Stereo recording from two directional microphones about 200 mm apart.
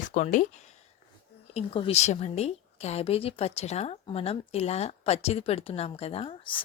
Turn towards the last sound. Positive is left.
turn(degrees=25)  # may be behind; listen again after turning